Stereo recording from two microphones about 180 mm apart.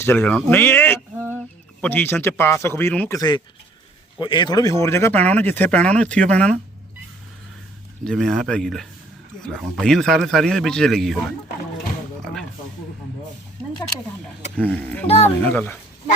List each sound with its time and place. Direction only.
0.0 s speech: 10° left (ahead or behind)
3.2 s speech: 25° left (ahead or behind); by 6.6 s 5° left (ahead or behind)
8.0 s speech: centre (ahead or behind)
12.2 s a sound: 5° left (ahead or behind)
14.5 s speech: 10° left (ahead or behind)
15.0 s a child's voice: 35° left (ahead or behind)
15.4 s speech: 10° left (ahead or behind)